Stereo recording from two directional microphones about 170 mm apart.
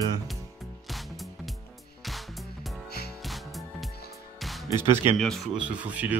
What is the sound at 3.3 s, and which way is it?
Music, centre (ahead or behind).